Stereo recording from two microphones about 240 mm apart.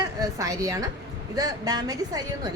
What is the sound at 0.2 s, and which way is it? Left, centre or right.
A woman's voice, centre.